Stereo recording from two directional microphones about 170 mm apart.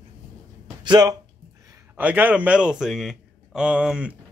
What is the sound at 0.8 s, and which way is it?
Speech, 25° right (ahead or behind).